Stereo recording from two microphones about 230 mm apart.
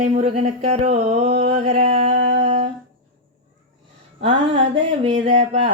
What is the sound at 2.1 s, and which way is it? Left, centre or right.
Music, right.